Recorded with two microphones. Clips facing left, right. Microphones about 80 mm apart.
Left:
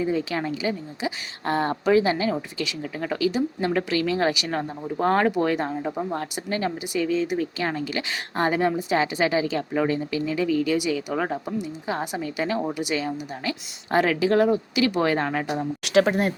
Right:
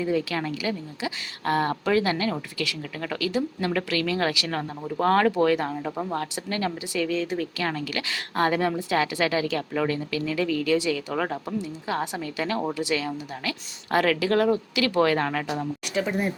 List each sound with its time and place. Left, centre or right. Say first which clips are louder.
0.0 s speech: left 1 dB; left
15.8 s speech: left 9 dB; left